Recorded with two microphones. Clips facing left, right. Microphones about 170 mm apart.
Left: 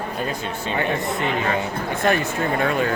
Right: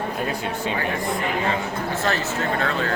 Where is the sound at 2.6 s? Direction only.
15° left (ahead or behind).